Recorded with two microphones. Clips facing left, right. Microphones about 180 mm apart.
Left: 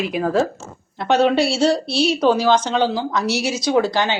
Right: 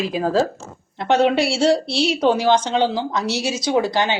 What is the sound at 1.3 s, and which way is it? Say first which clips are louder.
Speech: left 1 dB; 25° left (ahead or behind).